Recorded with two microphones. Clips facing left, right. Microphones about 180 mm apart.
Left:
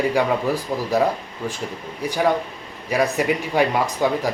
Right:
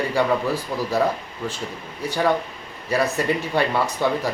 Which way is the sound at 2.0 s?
15° left (ahead or behind).